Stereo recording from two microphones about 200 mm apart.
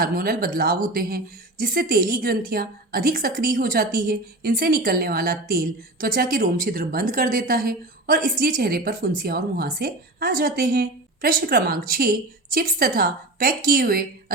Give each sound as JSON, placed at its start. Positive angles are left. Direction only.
{"t": 0.0, "sound": "speech", "side_deg": -50}